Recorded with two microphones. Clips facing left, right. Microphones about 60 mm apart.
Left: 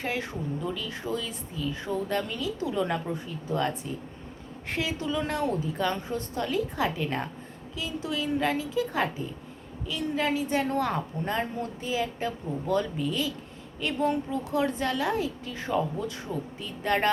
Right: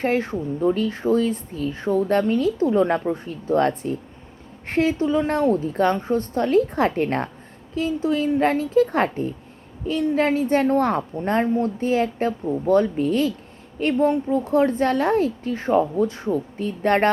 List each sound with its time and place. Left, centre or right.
0.0 s a woman's voice: right